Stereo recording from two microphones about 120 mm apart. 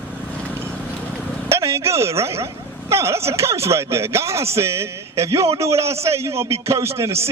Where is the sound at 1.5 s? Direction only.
25° right (ahead or behind).